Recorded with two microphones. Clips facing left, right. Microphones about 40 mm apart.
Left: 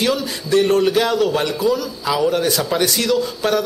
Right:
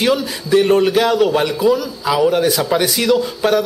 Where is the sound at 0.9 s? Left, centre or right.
Centre.